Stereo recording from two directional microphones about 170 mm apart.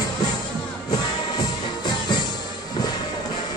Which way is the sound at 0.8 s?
25° left (ahead or behind).